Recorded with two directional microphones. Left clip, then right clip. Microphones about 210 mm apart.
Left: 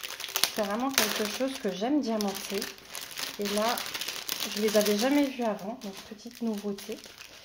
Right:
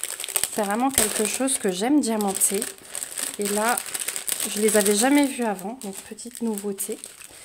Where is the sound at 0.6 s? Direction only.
60° right (ahead or behind).